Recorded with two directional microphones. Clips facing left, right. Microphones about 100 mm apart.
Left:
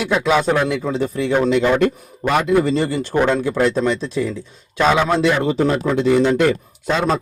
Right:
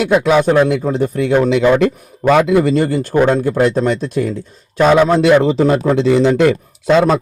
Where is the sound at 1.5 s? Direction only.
90° right.